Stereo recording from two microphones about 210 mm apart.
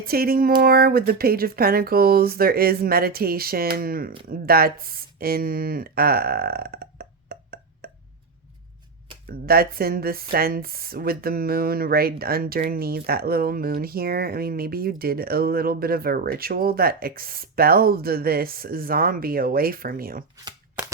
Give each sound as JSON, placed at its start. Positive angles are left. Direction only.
{"t": 0.0, "sound": "speech", "side_deg": -45}
{"t": 9.5, "sound": "speech", "side_deg": -45}